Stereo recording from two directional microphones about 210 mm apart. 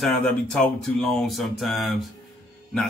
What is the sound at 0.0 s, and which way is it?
Speech, centre (ahead or behind).